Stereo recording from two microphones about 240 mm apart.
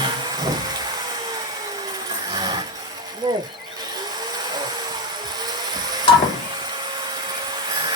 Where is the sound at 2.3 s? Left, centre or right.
Centre.